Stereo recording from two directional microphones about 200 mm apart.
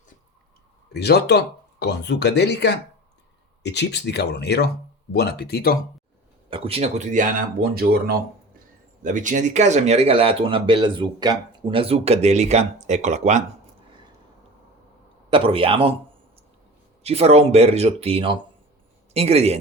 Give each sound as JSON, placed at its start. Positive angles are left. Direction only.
{"t": 0.9, "sound": "speech", "side_deg": 55}
{"t": 6.5, "sound": "speech", "side_deg": -30}
{"t": 9.0, "sound": "speech", "side_deg": -40}
{"t": 15.3, "sound": "speech", "side_deg": -25}
{"t": 17.0, "sound": "speech", "side_deg": -30}